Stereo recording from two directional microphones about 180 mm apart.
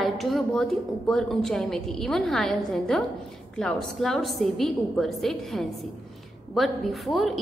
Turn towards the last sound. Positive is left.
turn(degrees=0)  # may be behind; listen again after turning